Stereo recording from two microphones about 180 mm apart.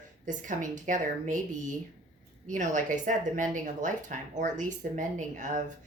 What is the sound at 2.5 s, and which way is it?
Speech, 45° right (ahead or behind).